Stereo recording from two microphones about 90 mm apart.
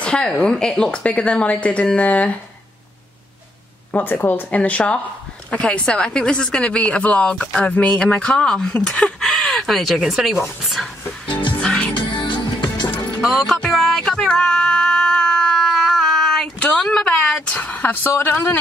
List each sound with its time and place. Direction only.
0.0 s a woman's voice: 10° left (ahead or behind)
3.9 s a woman's voice: 20° left (ahead or behind)
9.2 s speech: centre (ahead or behind)
11.6 s music: 10° left (ahead or behind)
12.0 s music: 60° left (ahead or behind)
13.2 s music: 5° left (ahead or behind)
18.0 s speech: 30° left (ahead or behind)